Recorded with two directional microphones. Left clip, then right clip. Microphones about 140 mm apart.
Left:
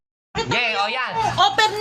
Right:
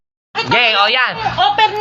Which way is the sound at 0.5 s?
25° right (ahead or behind).